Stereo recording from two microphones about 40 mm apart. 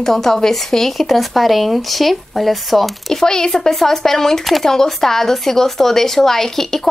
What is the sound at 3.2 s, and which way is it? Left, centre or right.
Speech, centre.